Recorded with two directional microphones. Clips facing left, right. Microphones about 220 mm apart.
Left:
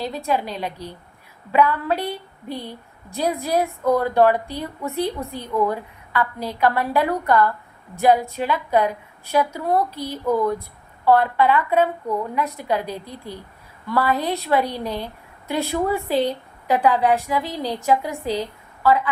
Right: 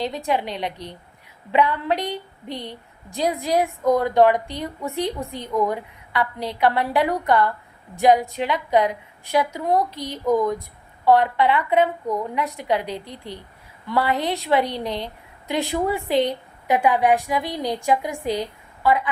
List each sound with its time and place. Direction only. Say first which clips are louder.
0.0 s a woman's voice: even; 15° right (ahead or behind)
2.5 s a woman's voice: left 1 dB; 10° left (ahead or behind)
3.1 s a woman's voice: even; 15° right (ahead or behind)
13.1 s a woman's voice: left 1 dB; 10° left (ahead or behind)
13.8 s a woman's voice: left 1 dB; 15° right (ahead or behind)
14.7 s a woman's voice: even; 10° left (ahead or behind)
15.4 s a woman's voice: left 1 dB; 15° right (ahead or behind)